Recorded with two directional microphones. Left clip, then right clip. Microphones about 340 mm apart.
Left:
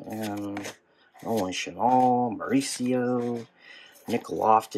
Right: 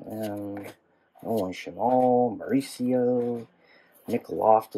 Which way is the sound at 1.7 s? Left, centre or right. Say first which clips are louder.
Left 1 dB; left.